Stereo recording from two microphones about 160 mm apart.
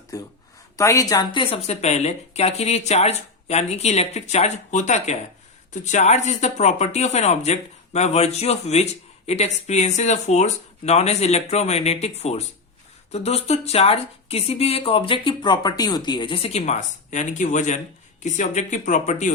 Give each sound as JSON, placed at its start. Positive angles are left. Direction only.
{"t": 0.1, "sound": "speech", "side_deg": 20}